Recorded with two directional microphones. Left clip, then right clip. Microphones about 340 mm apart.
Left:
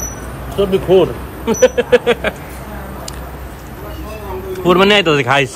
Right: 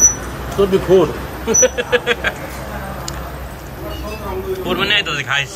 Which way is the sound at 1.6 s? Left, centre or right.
Centre.